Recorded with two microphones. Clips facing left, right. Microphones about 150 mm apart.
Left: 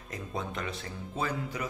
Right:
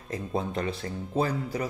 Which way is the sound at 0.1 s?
35° right (ahead or behind).